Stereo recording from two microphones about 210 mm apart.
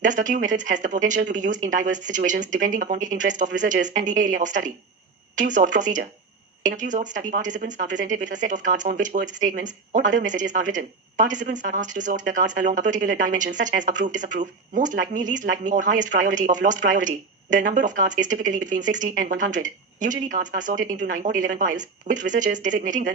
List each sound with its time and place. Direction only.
0.0 s speech: 35° right (ahead or behind)